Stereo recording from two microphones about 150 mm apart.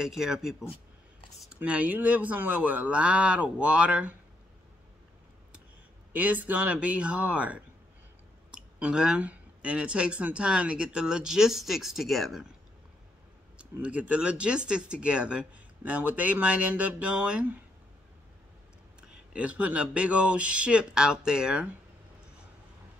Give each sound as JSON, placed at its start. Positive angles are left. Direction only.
{"t": 0.0, "sound": "speech", "side_deg": -5}
{"t": 6.1, "sound": "speech", "side_deg": -10}
{"t": 8.7, "sound": "speech", "side_deg": -5}
{"t": 13.6, "sound": "speech", "side_deg": -10}
{"t": 18.9, "sound": "speech", "side_deg": -10}